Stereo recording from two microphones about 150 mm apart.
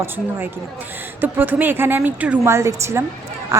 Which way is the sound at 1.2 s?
15° right (ahead or behind).